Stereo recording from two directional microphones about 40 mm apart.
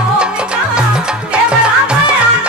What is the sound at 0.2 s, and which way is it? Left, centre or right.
Music, right.